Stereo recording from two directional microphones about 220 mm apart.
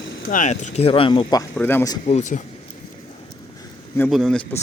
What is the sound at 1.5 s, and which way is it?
Speech, 10° left (ahead or behind).